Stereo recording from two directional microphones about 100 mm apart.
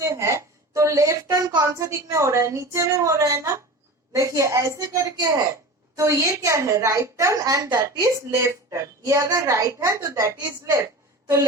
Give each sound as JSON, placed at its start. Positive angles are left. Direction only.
{"t": 0.0, "sound": "speech", "side_deg": -30}